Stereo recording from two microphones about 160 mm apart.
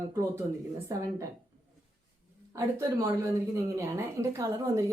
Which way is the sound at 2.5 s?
15° right (ahead or behind).